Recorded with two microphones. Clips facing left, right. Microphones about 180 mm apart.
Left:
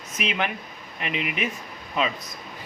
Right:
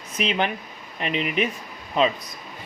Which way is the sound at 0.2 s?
30° right (ahead or behind).